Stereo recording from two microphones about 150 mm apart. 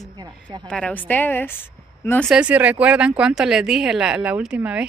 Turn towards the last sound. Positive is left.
turn(degrees=-10)  # may be behind; listen again after turning